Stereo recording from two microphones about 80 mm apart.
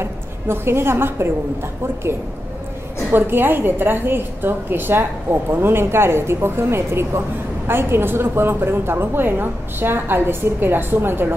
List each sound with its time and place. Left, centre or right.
0.0 s a woman's voice: right